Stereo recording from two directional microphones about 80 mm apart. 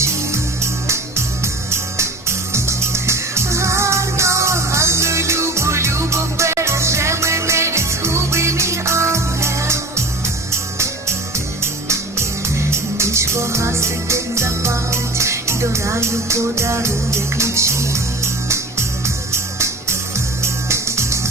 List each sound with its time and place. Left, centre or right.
1.7 s music: right
11.6 s music: right